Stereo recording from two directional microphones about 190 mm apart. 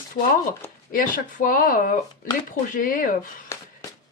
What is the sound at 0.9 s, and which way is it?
Speech, 45° left (ahead or behind).